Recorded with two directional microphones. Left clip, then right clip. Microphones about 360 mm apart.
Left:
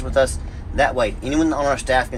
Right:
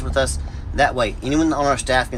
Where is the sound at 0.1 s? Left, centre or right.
Centre.